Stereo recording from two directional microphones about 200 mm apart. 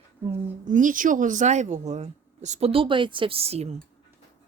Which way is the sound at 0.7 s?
40° right (ahead or behind).